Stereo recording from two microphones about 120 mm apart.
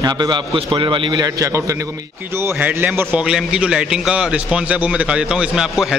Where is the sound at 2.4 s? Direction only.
15° right (ahead or behind).